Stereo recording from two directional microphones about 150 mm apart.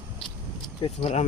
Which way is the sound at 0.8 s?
45° left (ahead or behind).